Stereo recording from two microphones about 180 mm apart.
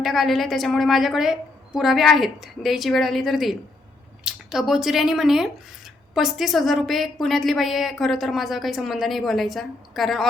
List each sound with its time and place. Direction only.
0.0 s a woman's voice: centre (ahead or behind)